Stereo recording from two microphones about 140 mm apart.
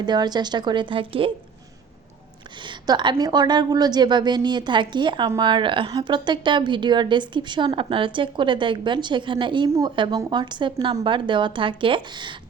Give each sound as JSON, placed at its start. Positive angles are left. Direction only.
{"t": 0.0, "sound": "a woman's voice", "side_deg": -30}
{"t": 2.6, "sound": "a woman's voice", "side_deg": -30}